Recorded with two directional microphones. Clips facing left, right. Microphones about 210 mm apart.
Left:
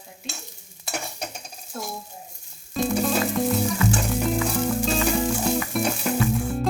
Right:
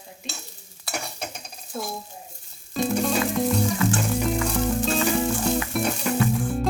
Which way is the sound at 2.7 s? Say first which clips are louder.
Even; centre (ahead or behind).